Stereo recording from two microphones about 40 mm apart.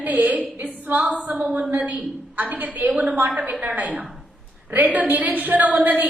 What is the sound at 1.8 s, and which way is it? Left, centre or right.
A woman's voice, right.